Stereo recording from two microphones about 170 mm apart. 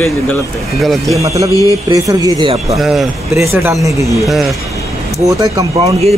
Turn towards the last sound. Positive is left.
turn(degrees=-40)  # may be behind; listen again after turning